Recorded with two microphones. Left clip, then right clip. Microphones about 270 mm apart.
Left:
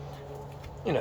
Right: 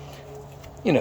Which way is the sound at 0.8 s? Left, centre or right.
Right.